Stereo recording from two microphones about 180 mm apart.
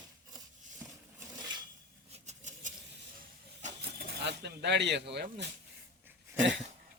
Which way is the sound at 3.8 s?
60° right (ahead or behind).